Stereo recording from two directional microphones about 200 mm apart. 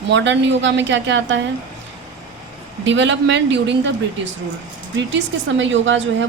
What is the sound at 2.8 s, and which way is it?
A woman's voice, 65° right (ahead or behind).